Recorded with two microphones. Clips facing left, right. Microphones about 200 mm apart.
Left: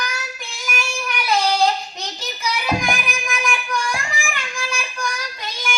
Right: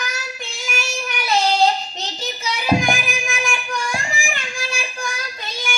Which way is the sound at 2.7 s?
25° right (ahead or behind).